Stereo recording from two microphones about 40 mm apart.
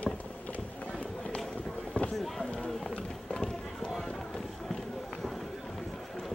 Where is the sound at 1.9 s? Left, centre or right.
Left.